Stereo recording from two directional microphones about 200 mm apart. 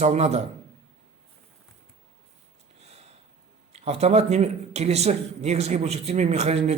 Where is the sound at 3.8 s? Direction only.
30° right (ahead or behind).